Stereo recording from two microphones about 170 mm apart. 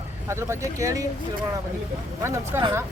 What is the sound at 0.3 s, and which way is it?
Speech, 15° right (ahead or behind).